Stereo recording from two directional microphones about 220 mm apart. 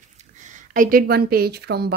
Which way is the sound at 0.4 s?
35° right (ahead or behind).